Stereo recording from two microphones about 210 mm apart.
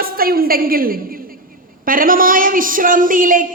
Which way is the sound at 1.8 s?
40° right (ahead or behind).